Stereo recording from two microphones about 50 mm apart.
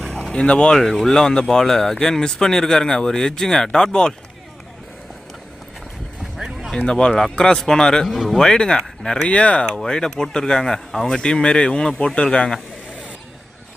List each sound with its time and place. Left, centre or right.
0.0 s boat: centre
0.4 s speech: centre
0.8 s speech: centre
6.3 s a sound: centre
6.7 s speech: centre
8.0 s speech: centre
8.4 s speech: centre
9.6 s speech: centre